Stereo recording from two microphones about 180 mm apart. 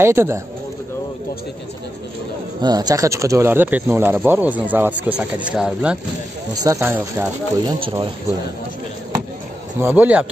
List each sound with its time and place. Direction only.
0.0 s speech: 15° right (ahead or behind)
2.6 s speech: 20° right (ahead or behind); by 5.9 s 5° right (ahead or behind)
6.5 s speech: 20° right (ahead or behind)
7.6 s speech: 25° right (ahead or behind)
9.8 s speech: 10° right (ahead or behind)